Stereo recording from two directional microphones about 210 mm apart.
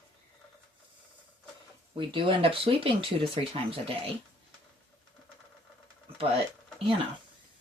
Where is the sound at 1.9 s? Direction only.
25° right (ahead or behind).